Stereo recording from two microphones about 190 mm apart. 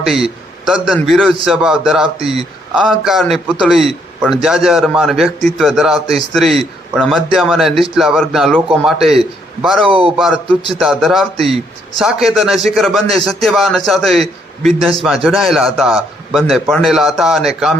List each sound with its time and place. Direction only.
0.6 s a man's voice: 5° right (ahead or behind)
9.8 s speech: 30° right (ahead or behind)
10.7 s a man's voice: centre (ahead or behind)